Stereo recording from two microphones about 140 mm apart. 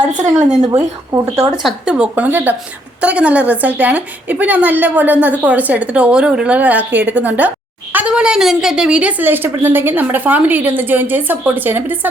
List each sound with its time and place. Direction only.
0.7 s speech: 25° right (ahead or behind)
1.6 s a woman's voice: 5° right (ahead or behind)